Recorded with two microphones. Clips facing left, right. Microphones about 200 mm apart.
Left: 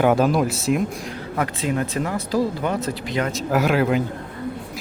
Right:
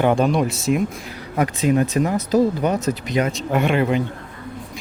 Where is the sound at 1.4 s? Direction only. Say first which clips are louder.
Right 5 dB; 20° right (ahead or behind).